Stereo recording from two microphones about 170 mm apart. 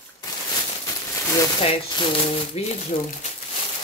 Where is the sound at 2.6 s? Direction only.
40° left (ahead or behind).